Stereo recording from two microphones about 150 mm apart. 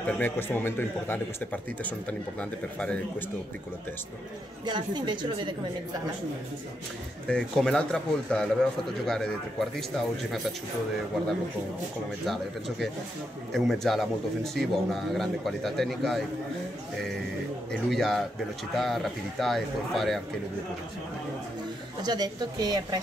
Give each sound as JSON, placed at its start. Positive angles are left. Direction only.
{"t": 0.0, "sound": "a man's voice", "side_deg": 15}
{"t": 4.6, "sound": "a woman's voice", "side_deg": -30}
{"t": 7.2, "sound": "speech", "side_deg": 5}
{"t": 12.3, "sound": "speech", "side_deg": 0}
{"t": 17.6, "sound": "speech", "side_deg": 0}
{"t": 22.0, "sound": "a woman's voice", "side_deg": -25}